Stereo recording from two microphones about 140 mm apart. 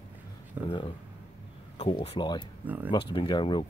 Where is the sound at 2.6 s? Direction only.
15° right (ahead or behind).